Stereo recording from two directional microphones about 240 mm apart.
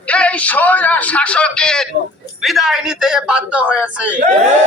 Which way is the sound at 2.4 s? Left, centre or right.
Centre.